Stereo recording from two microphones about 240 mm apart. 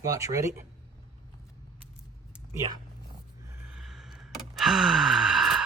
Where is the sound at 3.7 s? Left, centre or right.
Centre.